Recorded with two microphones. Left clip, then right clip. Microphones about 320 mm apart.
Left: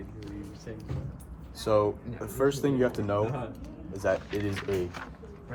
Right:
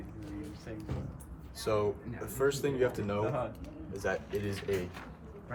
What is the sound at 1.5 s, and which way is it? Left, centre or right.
Speech, centre.